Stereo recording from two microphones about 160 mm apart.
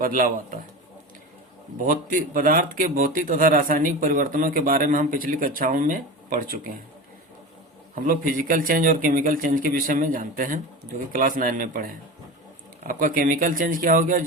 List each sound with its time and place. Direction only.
0.0 s speech: 60° right (ahead or behind)
1.8 s speech: 55° right (ahead or behind)
7.9 s speech: 60° right (ahead or behind)